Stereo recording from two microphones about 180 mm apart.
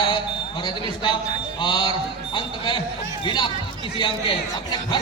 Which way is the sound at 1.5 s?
25° left (ahead or behind).